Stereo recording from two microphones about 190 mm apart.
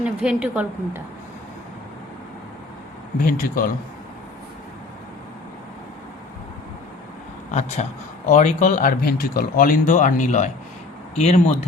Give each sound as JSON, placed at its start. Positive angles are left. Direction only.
{"t": 0.0, "sound": "a woman's voice", "side_deg": -5}
{"t": 3.2, "sound": "speech", "side_deg": 50}
{"t": 7.8, "sound": "a man's voice", "side_deg": 35}